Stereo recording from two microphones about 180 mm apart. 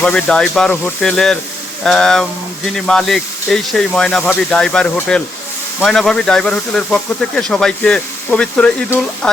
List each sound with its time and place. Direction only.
0.0 s speech: 5° left (ahead or behind)